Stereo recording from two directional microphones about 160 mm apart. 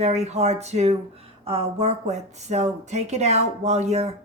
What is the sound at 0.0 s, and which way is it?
A woman's voice, 45° right (ahead or behind).